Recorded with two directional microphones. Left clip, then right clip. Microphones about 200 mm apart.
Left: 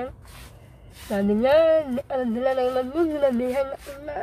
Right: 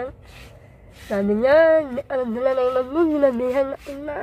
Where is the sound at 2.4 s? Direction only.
Centre (ahead or behind).